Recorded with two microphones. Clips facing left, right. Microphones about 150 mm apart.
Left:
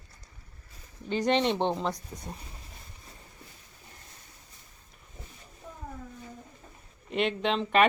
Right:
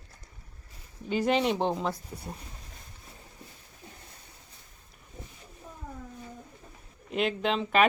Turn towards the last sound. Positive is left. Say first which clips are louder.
# left 1 dB
turn(degrees=0)  # may be behind; listen again after turning